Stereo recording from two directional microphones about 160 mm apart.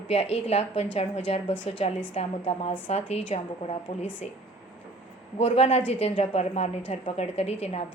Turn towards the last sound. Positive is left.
turn(degrees=40)  # may be behind; listen again after turning